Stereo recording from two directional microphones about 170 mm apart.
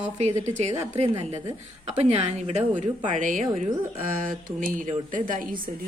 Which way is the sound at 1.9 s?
40° right (ahead or behind).